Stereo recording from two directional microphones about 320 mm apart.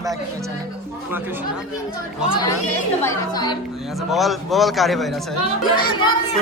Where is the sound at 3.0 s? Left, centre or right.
Centre.